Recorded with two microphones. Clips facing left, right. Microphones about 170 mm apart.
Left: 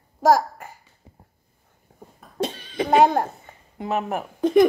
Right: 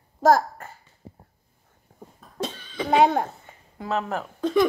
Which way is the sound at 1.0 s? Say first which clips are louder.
Right 8 dB; 30° right (ahead or behind).